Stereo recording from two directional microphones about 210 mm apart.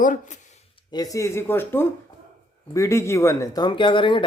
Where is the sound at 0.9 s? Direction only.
15° left (ahead or behind).